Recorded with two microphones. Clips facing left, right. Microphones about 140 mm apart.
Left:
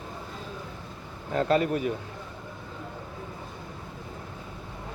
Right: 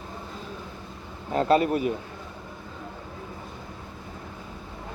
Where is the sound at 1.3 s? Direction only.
30° right (ahead or behind).